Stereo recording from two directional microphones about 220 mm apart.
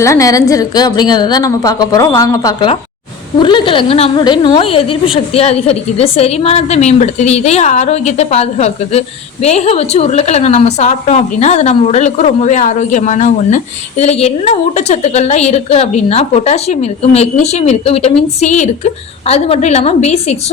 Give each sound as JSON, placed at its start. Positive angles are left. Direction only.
{"t": 0.0, "sound": "a woman's voice", "side_deg": 15}